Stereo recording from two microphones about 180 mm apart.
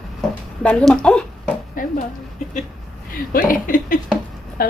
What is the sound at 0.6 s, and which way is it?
Speech, 5° left (ahead or behind).